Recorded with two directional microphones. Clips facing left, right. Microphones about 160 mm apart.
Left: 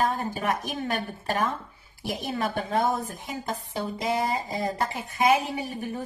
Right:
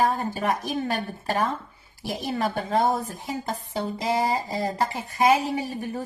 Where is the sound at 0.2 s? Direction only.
35° right (ahead or behind).